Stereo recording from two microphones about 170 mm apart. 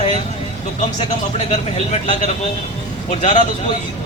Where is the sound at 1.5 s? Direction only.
40° left (ahead or behind).